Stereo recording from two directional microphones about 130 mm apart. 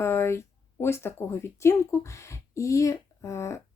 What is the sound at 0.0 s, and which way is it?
Speech, 20° left (ahead or behind).